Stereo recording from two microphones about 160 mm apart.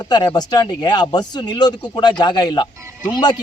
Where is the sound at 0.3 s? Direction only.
25° left (ahead or behind).